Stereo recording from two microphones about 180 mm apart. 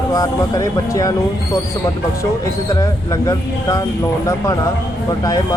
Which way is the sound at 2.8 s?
20° left (ahead or behind).